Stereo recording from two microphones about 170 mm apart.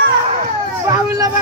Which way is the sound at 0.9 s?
20° right (ahead or behind).